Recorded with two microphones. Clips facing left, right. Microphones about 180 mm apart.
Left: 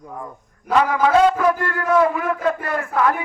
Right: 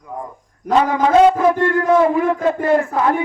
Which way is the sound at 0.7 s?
25° right (ahead or behind).